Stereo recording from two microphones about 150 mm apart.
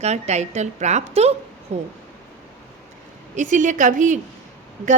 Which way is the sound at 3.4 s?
55° right (ahead or behind).